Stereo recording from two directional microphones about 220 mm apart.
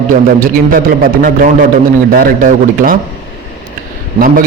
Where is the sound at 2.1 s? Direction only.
40° right (ahead or behind).